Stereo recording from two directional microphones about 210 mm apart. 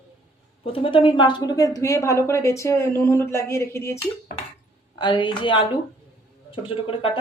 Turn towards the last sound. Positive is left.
turn(degrees=25)  # may be behind; listen again after turning